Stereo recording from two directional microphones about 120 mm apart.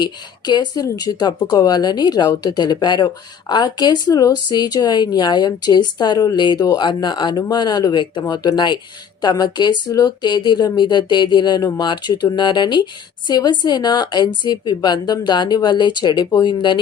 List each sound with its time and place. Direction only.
0.0 s speech: 40° left (ahead or behind)